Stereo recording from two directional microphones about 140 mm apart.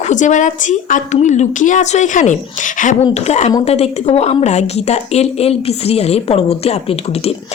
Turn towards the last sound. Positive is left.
turn(degrees=45)  # may be behind; listen again after turning